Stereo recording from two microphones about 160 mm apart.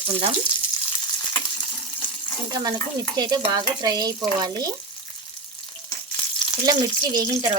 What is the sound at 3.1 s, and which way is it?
A woman's voice, 25° right (ahead or behind).